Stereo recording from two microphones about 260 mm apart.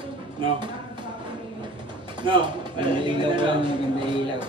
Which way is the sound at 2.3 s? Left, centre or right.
Centre.